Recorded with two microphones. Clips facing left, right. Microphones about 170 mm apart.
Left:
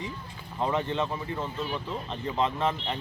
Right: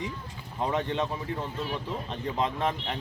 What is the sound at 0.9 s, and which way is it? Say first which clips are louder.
Speech: even; 15° right (ahead or behind).